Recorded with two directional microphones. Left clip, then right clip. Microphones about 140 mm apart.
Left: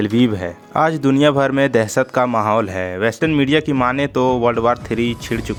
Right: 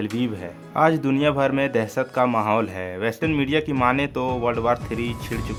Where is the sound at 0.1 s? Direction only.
50° left (ahead or behind).